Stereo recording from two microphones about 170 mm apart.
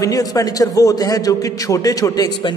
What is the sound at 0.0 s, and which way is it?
A man's voice, 20° left (ahead or behind).